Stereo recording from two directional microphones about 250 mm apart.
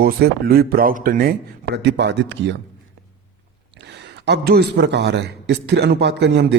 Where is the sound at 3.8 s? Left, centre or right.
Right.